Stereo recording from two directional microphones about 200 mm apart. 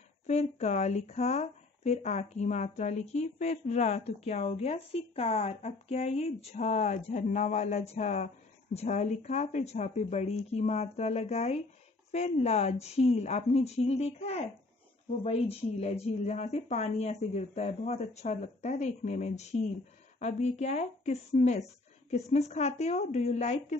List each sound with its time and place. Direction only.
0.3 s speech: 35° left (ahead or behind)